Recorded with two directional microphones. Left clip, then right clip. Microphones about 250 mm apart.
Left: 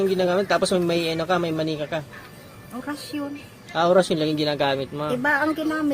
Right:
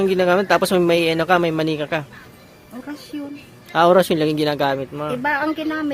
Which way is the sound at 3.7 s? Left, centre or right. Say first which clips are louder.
Right 5 dB; right.